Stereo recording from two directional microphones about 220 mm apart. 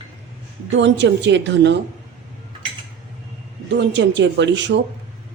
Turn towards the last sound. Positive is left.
turn(degrees=-55)  # may be behind; listen again after turning